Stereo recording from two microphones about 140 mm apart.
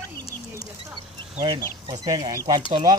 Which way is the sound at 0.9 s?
35° right (ahead or behind).